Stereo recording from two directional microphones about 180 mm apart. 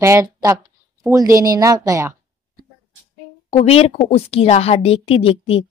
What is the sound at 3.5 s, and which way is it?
A woman's voice, 35° left (ahead or behind).